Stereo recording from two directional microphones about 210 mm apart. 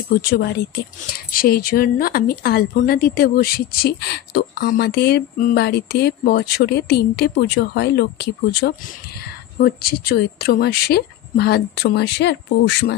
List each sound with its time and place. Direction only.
0.2 s speech: 45° left (ahead or behind)